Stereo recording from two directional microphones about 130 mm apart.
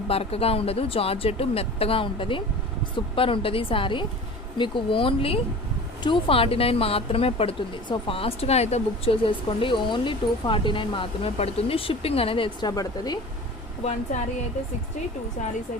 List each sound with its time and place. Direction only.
0.1 s speech: 50° left (ahead or behind); by 13.1 s 30° left (ahead or behind)